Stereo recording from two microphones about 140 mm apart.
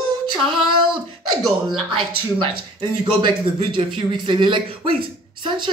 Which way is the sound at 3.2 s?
35° right (ahead or behind).